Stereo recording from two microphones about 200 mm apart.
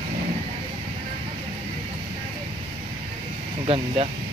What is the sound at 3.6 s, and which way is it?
Speech, 30° right (ahead or behind).